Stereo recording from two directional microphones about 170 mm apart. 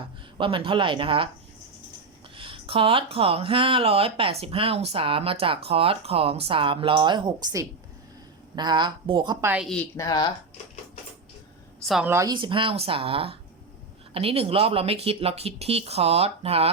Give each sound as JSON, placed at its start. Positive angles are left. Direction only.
{"t": 0.3, "sound": "speech", "side_deg": -30}
{"t": 2.3, "sound": "a woman's voice", "side_deg": -30}
{"t": 10.0, "sound": "speech", "side_deg": 20}
{"t": 11.9, "sound": "a woman's voice", "side_deg": -5}
{"t": 12.1, "sound": "speech", "side_deg": -25}